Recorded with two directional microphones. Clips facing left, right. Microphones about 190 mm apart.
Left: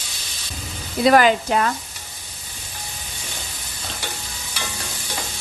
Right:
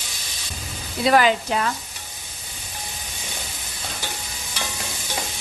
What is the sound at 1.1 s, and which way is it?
Speech, 50° left (ahead or behind).